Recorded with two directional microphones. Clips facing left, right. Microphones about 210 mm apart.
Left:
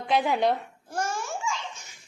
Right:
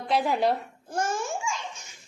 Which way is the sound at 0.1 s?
Centre (ahead or behind).